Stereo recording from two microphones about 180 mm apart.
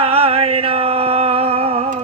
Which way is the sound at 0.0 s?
30° right (ahead or behind).